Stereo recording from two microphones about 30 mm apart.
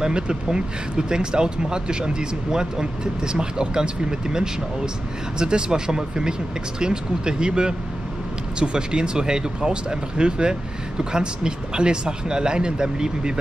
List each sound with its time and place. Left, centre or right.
0.0 s speech: right